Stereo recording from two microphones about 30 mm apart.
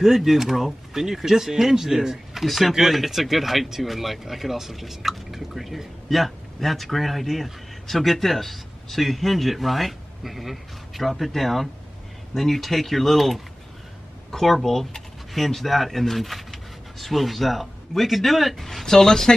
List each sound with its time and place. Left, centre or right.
0.0 s speech: centre
2.4 s a man's voice: centre
5.3 s drip: centre
6.0 s a man's voice: centre